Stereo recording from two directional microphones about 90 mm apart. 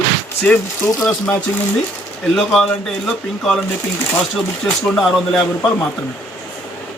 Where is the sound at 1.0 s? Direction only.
20° left (ahead or behind).